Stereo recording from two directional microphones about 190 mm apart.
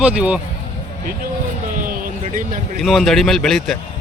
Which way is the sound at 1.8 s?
45° right (ahead or behind).